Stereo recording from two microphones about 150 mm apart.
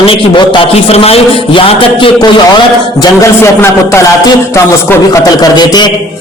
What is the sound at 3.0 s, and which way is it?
A man's voice, 15° left (ahead or behind).